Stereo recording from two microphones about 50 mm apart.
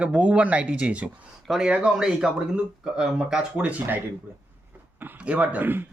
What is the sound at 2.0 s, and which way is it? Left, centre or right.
Speech, centre.